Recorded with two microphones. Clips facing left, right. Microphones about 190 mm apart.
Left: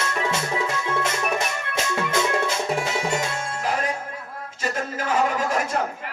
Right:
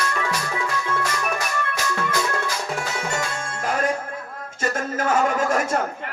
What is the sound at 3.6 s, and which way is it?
Music, 45° right (ahead or behind).